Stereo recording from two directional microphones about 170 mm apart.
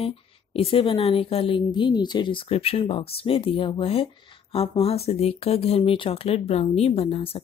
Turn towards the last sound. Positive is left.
turn(degrees=35)  # may be behind; listen again after turning